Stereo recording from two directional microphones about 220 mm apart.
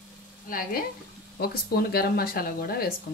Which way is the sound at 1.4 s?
45° left (ahead or behind).